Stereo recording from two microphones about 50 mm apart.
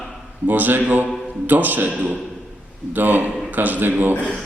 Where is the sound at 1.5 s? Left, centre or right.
Right.